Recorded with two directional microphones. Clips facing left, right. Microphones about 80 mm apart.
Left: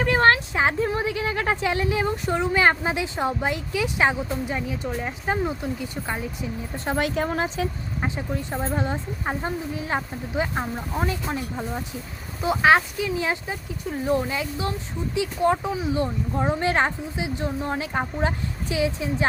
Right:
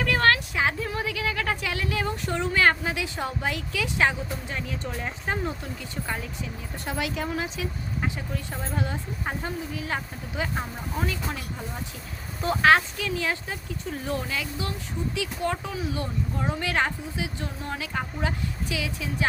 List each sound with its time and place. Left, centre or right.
0.0 s speech: left
6.8 s a woman's voice: left
8.0 s speech: left
12.4 s speech: centre